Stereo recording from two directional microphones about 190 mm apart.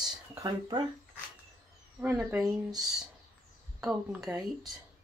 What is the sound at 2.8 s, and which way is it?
Speech, centre (ahead or behind).